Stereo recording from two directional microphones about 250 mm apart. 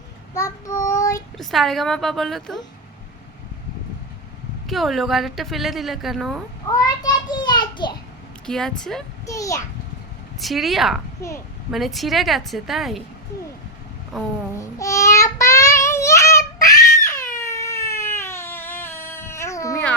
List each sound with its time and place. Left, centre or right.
0.3 s child singing: centre
1.4 s a woman's voice: centre
4.6 s a woman's voice: centre
6.7 s a child's voice: centre
8.4 s a woman's voice: centre
9.2 s a child's voice: centre
10.4 s a woman's voice: centre
14.1 s a woman's voice: centre
14.5 s child singing: centre
17.3 s a sound: centre